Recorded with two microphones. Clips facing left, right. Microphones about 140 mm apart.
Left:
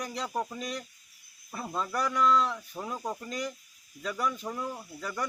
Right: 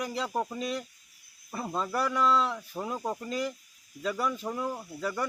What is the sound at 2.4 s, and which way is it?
Speech, 5° right (ahead or behind).